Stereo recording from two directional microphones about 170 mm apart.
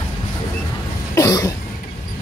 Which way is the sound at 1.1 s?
20° left (ahead or behind).